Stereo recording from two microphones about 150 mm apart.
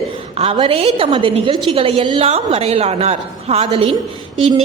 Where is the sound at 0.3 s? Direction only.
40° right (ahead or behind).